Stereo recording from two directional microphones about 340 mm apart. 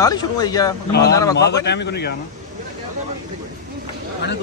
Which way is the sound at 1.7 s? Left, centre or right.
Left.